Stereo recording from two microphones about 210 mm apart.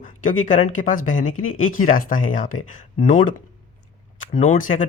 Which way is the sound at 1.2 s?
75° left (ahead or behind).